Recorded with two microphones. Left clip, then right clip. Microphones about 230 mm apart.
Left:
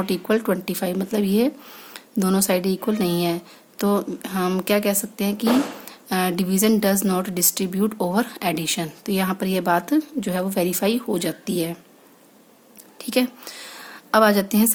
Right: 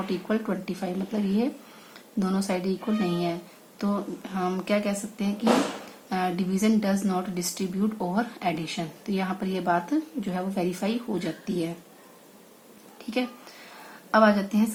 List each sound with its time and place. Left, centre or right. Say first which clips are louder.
0.0 s a woman's voice: left 7 dB; left
13.1 s a woman's voice: left 7 dB; left